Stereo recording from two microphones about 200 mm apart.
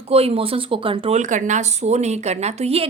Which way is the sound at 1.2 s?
40° right (ahead or behind).